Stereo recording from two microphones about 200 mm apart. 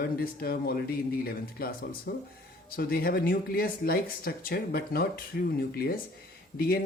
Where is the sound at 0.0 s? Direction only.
50° left (ahead or behind).